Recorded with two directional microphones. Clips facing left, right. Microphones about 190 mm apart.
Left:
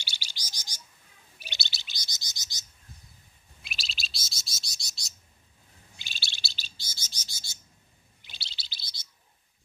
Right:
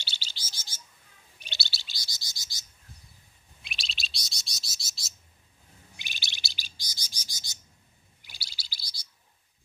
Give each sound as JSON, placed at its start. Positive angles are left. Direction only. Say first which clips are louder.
{"t": 0.0, "sound": "chirp", "louder": "even", "side_deg": 15}
{"t": 3.6, "sound": "chirp", "louder": "even", "side_deg": 0}
{"t": 5.9, "sound": "chirp", "louder": "even", "side_deg": -15}
{"t": 8.2, "sound": "chirp", "louder": "left 1 dB", "side_deg": 25}